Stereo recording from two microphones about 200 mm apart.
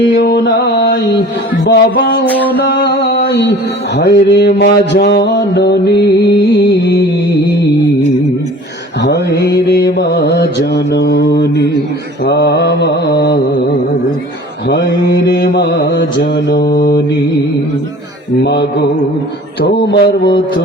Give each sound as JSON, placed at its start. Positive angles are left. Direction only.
{"t": 0.0, "sound": "mantra", "side_deg": 60}
{"t": 9.0, "sound": "mantra", "side_deg": 60}
{"t": 14.7, "sound": "mantra", "side_deg": 55}
{"t": 19.6, "sound": "mantra", "side_deg": 55}